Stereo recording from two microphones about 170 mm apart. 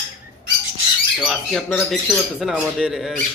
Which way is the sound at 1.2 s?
Centre (ahead or behind).